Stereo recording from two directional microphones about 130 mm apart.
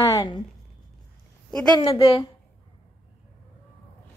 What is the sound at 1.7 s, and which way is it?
Speech, 40° left (ahead or behind).